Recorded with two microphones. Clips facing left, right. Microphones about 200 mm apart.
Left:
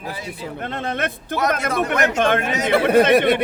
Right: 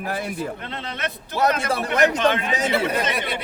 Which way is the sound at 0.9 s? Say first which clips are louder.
Left 5 dB; 50° left (ahead or behind).